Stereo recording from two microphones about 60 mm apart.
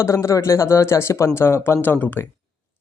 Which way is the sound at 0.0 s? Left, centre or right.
Left.